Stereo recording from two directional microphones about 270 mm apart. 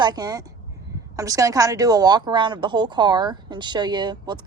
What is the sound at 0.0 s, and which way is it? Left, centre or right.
Speech, centre.